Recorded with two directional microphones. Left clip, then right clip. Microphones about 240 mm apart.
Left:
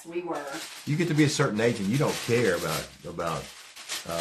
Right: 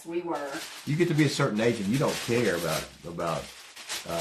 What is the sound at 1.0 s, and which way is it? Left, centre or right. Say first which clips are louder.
Speech: left 1 dB; left.